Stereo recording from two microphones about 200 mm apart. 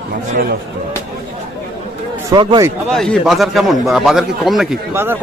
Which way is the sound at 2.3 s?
20° right (ahead or behind).